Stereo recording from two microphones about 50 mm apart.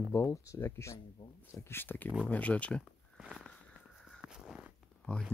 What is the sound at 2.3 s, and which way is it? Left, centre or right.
Speech, left.